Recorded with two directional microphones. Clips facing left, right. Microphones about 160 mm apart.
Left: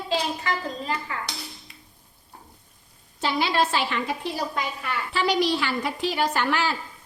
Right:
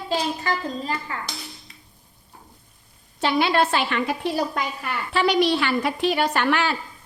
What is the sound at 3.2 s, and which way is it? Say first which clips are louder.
A woman's voice: right 3 dB; 60° right (ahead or behind).